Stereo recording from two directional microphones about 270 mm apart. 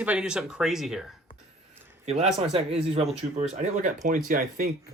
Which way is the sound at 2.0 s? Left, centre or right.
Right.